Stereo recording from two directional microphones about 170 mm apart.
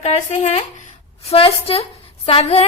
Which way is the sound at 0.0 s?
40° left (ahead or behind).